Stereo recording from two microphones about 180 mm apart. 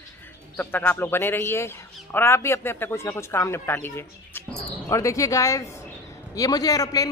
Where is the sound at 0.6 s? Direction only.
10° left (ahead or behind).